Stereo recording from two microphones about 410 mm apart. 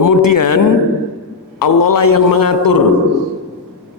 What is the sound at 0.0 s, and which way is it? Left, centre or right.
A man's voice, left.